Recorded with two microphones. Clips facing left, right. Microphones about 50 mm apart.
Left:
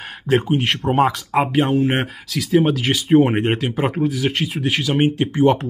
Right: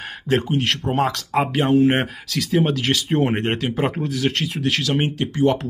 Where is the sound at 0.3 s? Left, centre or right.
Centre.